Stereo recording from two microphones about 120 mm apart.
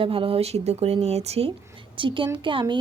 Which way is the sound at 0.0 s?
50° right (ahead or behind).